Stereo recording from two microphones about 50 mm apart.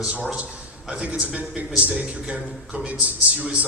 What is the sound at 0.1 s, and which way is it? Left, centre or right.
A man's voice, right.